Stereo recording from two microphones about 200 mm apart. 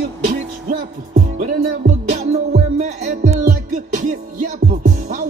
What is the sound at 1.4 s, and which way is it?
Music, 35° right (ahead or behind).